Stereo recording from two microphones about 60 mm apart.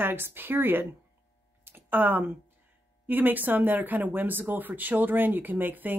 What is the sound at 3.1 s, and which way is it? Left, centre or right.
Speech, right.